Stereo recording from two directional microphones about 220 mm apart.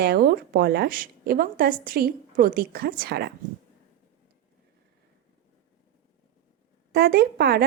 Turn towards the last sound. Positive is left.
turn(degrees=-45)  # may be behind; listen again after turning